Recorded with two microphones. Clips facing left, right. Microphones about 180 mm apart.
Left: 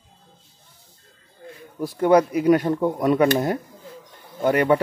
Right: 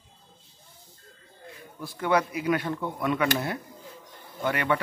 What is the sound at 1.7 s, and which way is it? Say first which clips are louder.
Speech: left 9 dB; 40° left (ahead or behind).